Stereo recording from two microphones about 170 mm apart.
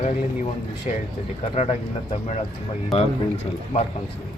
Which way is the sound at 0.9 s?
40° left (ahead or behind).